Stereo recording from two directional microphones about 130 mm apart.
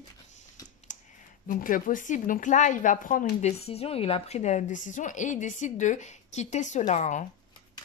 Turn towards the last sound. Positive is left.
turn(degrees=70)  # may be behind; listen again after turning